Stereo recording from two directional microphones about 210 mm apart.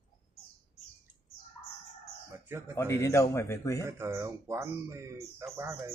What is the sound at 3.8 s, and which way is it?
Speech, 10° right (ahead or behind).